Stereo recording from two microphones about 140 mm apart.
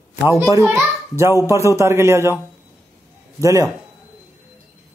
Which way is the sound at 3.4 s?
20° right (ahead or behind).